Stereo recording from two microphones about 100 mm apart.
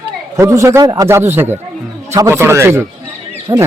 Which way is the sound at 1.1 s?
20° right (ahead or behind).